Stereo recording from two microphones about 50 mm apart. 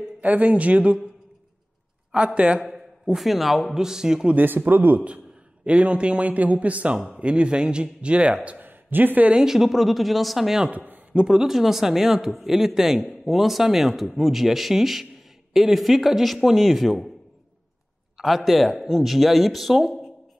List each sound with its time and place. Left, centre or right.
0.2 s a man's voice: right
2.1 s a man's voice: right
2.6 s a man's voice: centre
4.4 s speech: right
5.7 s a man's voice: right
8.6 s a sound: right
9.3 s speech: centre
10.7 s speech: right
11.1 s speech: centre
18.1 s speech: centre